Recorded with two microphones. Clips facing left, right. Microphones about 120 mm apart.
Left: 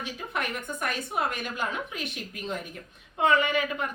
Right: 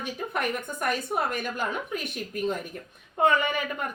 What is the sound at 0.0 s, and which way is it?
Speech, 50° right (ahead or behind).